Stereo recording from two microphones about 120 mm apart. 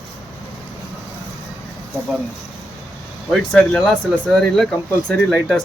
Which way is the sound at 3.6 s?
10° left (ahead or behind).